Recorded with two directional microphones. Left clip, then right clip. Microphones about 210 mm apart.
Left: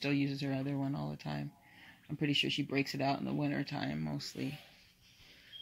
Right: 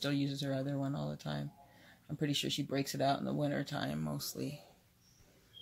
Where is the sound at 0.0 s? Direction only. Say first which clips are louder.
Left 1 dB; centre (ahead or behind).